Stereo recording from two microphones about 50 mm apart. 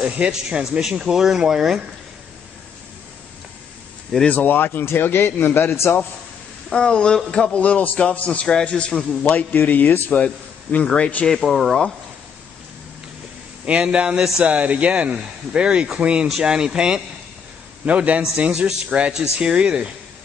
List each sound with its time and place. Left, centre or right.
0.0 s speech: right
4.3 s a man's voice: left
6.7 s a man's voice: centre
7.5 s a man's voice: left
9.2 s a man's voice: left
10.1 s a man's voice: left
11.2 s speech: centre
13.7 s speech: right
17.8 s speech: right